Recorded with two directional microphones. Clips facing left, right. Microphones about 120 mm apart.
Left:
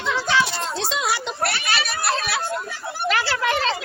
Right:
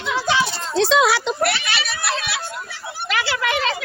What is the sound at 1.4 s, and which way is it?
Children playing, 40° left (ahead or behind).